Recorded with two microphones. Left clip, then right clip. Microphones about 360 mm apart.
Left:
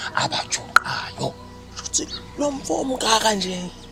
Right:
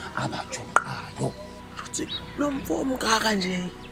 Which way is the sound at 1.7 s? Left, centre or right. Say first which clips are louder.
Left 9 dB; centre.